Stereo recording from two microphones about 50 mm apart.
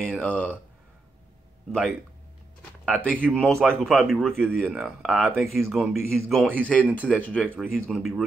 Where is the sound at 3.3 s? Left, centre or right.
Centre.